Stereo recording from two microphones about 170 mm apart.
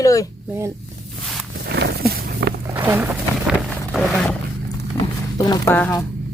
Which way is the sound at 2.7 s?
10° right (ahead or behind).